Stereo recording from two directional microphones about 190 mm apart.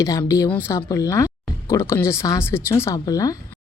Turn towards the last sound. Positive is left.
turn(degrees=20)  # may be behind; listen again after turning